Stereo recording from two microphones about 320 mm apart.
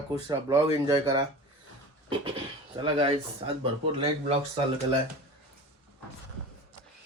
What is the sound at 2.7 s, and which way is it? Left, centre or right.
Speech, centre.